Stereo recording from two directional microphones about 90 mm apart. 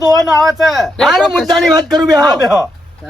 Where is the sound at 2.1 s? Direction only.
45° right (ahead or behind).